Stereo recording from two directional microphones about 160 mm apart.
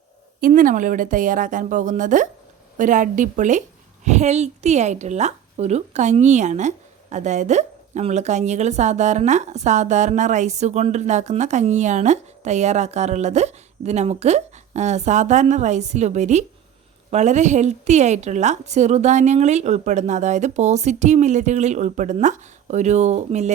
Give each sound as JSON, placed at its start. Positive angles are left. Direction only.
{"t": 0.4, "sound": "a woman's voice", "side_deg": -55}